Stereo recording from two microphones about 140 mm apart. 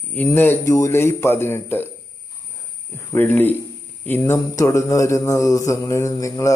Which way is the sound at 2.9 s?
15° left (ahead or behind).